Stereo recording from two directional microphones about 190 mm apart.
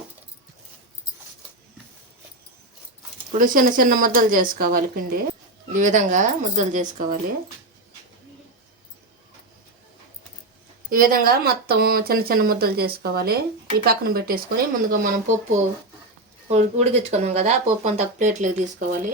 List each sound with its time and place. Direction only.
3.3 s speech: 45° right (ahead or behind)
10.8 s speech: 50° right (ahead or behind)
16.5 s speech: 35° right (ahead or behind)